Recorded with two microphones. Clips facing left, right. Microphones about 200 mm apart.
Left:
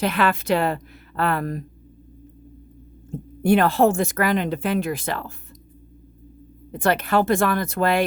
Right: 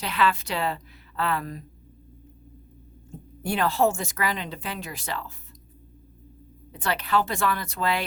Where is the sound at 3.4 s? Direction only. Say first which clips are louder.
Left 6 dB; 55° left (ahead or behind).